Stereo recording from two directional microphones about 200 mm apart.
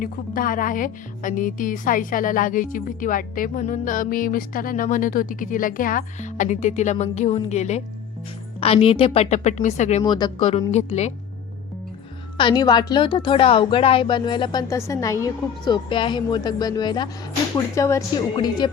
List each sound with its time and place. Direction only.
0.0 s a woman's voice: 45° left (ahead or behind)
10.0 s a woman's voice: 20° left (ahead or behind)
12.4 s a woman's voice: 20° left (ahead or behind)